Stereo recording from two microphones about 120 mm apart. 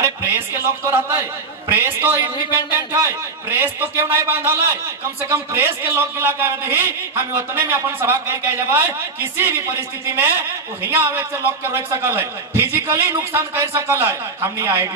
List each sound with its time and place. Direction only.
0.0 s a man's voice: 20° right (ahead or behind)